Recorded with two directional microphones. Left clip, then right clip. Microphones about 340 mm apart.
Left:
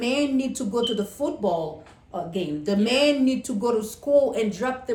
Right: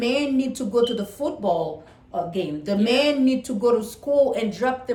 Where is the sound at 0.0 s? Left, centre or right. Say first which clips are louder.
Right 2 dB; centre.